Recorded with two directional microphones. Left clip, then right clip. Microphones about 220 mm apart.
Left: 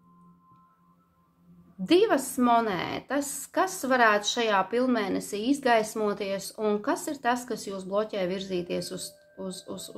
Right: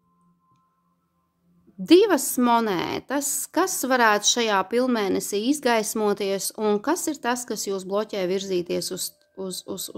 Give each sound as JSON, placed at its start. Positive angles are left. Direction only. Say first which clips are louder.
{"t": 1.9, "sound": "a woman's voice", "louder": "right 5 dB", "side_deg": -50}